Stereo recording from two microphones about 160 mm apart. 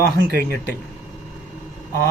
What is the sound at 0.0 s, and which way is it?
Speech, 80° right.